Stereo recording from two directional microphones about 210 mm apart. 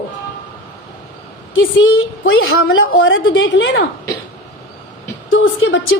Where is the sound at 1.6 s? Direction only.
70° left (ahead or behind).